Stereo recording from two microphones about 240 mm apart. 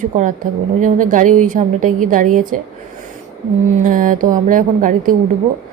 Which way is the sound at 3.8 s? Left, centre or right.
Right.